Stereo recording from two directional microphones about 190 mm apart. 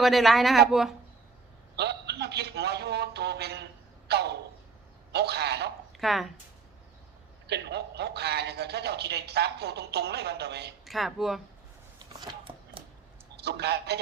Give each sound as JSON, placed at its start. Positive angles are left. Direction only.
{"t": 0.0, "sound": "speech", "side_deg": 0}
{"t": 1.7, "sound": "a man's voice", "side_deg": -60}
{"t": 6.0, "sound": "speech", "side_deg": 0}
{"t": 7.4, "sound": "a man's voice", "side_deg": -60}
{"t": 10.8, "sound": "speech", "side_deg": 0}
{"t": 11.9, "sound": "shuffling cards", "side_deg": -20}
{"t": 13.3, "sound": "a man's voice", "side_deg": -60}